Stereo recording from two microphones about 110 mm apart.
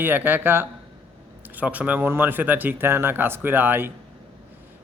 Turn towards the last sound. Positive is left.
turn(degrees=-20)  # may be behind; listen again after turning